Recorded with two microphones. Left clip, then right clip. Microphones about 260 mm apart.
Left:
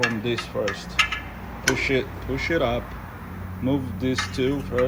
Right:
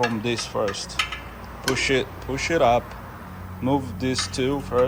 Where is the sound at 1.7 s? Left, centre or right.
Centre.